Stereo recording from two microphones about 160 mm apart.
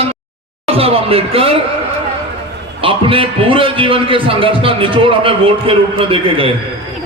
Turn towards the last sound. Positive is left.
turn(degrees=-35)  # may be behind; listen again after turning